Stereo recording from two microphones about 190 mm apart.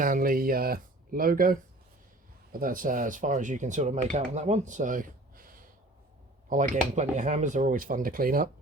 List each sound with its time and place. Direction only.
0.0 s speech: 45° right (ahead or behind)